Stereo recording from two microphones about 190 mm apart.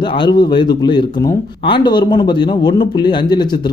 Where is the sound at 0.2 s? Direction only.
25° left (ahead or behind).